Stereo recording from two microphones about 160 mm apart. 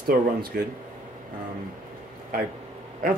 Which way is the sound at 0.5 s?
70° right (ahead or behind).